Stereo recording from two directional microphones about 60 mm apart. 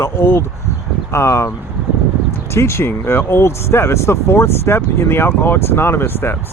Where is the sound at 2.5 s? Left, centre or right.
Left.